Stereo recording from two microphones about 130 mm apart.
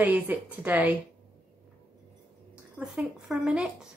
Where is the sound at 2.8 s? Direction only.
5° right (ahead or behind).